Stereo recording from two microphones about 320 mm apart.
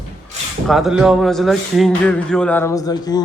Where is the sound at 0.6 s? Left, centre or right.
Centre.